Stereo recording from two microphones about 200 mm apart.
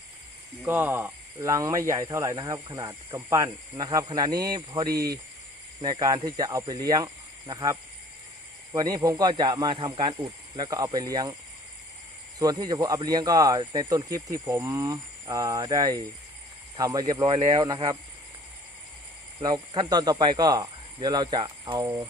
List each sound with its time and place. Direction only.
0.6 s speech: 10° right (ahead or behind)
12.4 s speech: 20° right (ahead or behind)
19.4 s speech: 20° right (ahead or behind)